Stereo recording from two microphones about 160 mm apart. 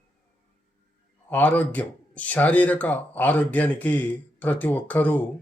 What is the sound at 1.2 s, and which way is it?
Speech, 10° left (ahead or behind).